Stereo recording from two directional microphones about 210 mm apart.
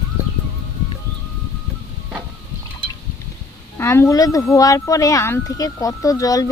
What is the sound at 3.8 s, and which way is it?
Speech, 10° left (ahead or behind).